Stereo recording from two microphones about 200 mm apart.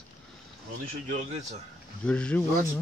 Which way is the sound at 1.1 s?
35° right (ahead or behind).